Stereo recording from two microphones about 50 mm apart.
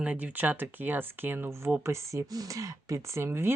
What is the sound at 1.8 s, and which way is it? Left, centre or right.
Speech, right.